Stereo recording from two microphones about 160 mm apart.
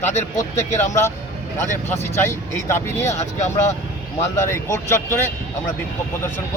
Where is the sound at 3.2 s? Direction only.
45° left (ahead or behind).